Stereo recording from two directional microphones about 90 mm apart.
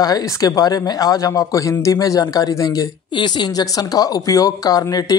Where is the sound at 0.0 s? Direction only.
40° left (ahead or behind).